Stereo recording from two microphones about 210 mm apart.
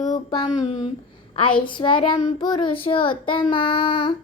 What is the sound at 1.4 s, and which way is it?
Child singing, 25° left (ahead or behind).